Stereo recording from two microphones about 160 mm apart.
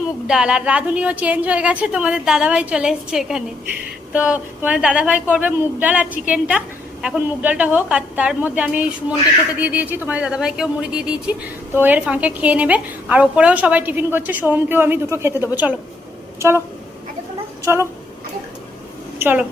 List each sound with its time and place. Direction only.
0.3 s a woman's voice: 5° right (ahead or behind)
17.7 s a woman's voice: 15° right (ahead or behind)
19.2 s a woman's voice: 10° right (ahead or behind)